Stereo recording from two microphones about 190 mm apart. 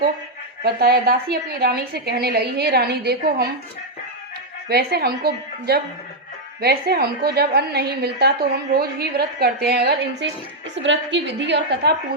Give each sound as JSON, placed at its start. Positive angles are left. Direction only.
{"t": 0.6, "sound": "a woman's voice", "side_deg": -55}
{"t": 4.7, "sound": "a woman's voice", "side_deg": -55}